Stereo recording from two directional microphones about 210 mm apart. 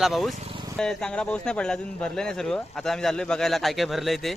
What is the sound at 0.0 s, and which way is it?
Speech, centre (ahead or behind).